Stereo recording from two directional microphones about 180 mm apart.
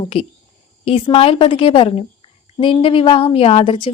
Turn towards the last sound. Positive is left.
turn(degrees=30)  # may be behind; listen again after turning